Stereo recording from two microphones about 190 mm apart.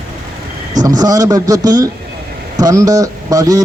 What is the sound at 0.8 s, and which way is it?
Speech, 20° right (ahead or behind).